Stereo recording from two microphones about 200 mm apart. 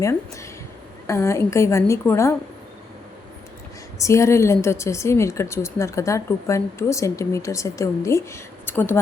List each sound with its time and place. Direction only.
0.0 s a woman's voice: 15° left (ahead or behind)
4.0 s a woman's voice: 15° left (ahead or behind)